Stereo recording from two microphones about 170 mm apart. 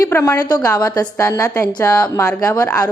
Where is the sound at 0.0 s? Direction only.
15° left (ahead or behind).